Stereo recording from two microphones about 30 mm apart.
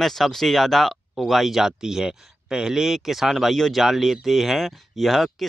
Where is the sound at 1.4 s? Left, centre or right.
Centre.